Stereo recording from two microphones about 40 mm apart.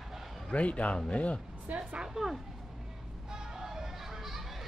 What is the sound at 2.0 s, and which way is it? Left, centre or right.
Speech, centre.